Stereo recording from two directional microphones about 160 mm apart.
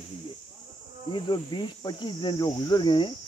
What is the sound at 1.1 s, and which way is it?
Cricket, 30° left (ahead or behind).